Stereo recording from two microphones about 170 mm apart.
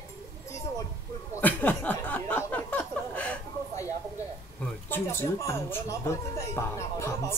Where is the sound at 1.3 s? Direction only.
10° left (ahead or behind).